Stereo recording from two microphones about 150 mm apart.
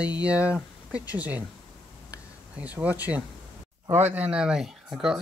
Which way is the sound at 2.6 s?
10° right (ahead or behind).